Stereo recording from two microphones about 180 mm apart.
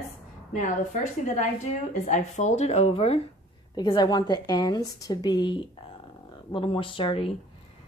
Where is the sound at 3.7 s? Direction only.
25° left (ahead or behind).